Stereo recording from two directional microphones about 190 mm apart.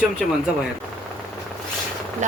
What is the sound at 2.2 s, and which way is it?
Speech, 40° right (ahead or behind).